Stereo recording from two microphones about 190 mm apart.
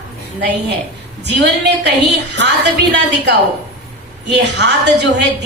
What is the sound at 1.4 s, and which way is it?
A woman's voice, 65° right (ahead or behind).